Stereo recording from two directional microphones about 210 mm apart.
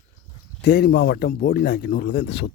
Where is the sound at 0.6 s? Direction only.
50° left (ahead or behind).